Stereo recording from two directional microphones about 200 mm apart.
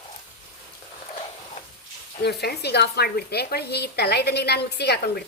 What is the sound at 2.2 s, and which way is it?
A woman's voice, 55° left (ahead or behind).